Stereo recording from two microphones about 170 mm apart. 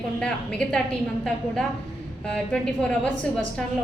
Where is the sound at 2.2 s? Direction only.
5° left (ahead or behind).